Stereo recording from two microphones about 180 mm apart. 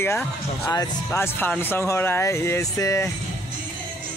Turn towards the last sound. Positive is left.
turn(degrees=15)  # may be behind; listen again after turning